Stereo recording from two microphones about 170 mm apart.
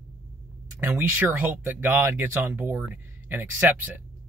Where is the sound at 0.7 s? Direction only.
10° right (ahead or behind).